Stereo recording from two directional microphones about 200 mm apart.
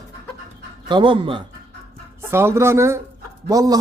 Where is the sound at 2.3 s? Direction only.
10° right (ahead or behind).